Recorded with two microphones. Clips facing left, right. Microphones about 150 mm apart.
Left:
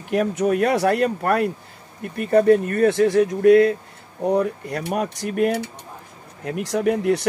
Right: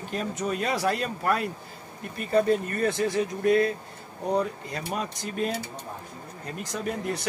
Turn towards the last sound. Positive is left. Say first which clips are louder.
# left 11 dB
turn(degrees=65)  # may be behind; listen again after turning